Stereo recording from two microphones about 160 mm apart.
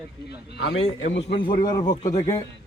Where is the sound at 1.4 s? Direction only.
25° left (ahead or behind).